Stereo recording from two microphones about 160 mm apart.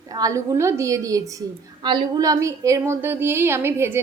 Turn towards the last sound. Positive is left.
turn(degrees=-15)  # may be behind; listen again after turning